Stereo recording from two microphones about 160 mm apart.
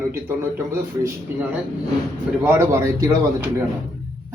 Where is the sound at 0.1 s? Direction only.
15° right (ahead or behind).